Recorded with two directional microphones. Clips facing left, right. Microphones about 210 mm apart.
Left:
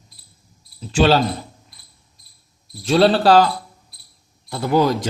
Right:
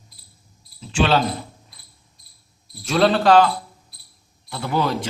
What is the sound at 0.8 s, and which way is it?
Speech, 40° left (ahead or behind).